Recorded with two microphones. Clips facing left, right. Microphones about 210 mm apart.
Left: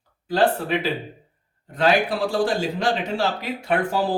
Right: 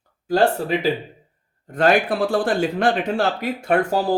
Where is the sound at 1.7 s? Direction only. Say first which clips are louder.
Right 2 dB; 50° right (ahead or behind).